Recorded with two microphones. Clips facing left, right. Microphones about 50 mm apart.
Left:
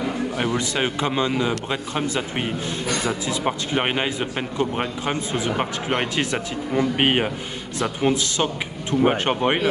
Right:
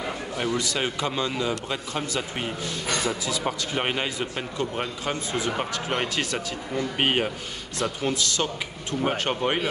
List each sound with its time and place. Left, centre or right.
0.4 s a man's voice: left